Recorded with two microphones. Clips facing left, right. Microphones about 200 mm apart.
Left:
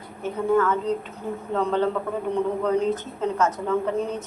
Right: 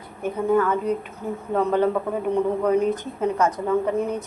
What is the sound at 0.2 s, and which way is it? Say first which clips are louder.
A woman's voice: right 1 dB; 15° right (ahead or behind).